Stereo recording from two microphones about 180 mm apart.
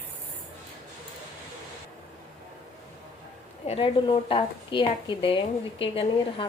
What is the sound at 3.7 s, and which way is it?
Speech, 30° left (ahead or behind).